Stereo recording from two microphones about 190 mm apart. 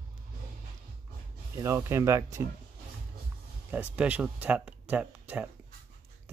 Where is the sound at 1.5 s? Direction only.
15° right (ahead or behind).